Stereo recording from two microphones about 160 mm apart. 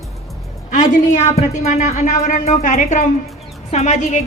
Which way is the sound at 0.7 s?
50° left (ahead or behind).